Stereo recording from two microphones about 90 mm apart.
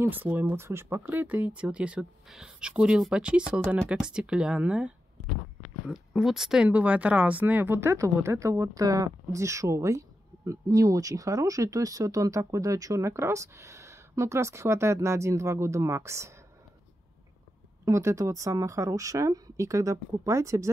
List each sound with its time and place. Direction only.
0.0 s speech: 20° right (ahead or behind); by 6.7 s 5° right (ahead or behind)
6.7 s speech: 15° right (ahead or behind); by 16.3 s 35° right (ahead or behind)
17.8 s speech: 35° right (ahead or behind)